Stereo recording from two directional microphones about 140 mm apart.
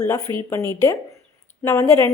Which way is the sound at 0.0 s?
25° left (ahead or behind).